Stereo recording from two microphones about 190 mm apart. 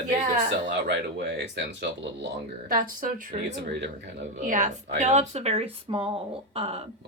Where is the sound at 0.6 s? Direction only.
65° right (ahead or behind).